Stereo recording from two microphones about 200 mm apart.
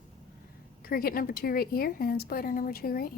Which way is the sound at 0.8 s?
45° left (ahead or behind).